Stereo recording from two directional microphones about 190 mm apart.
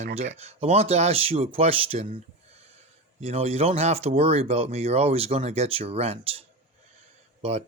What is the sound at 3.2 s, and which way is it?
Speech, 35° right (ahead or behind).